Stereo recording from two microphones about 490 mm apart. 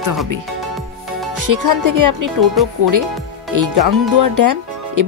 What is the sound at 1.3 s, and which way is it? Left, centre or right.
Music, right.